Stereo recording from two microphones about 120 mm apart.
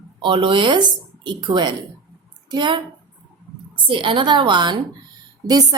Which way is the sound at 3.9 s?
45° right (ahead or behind).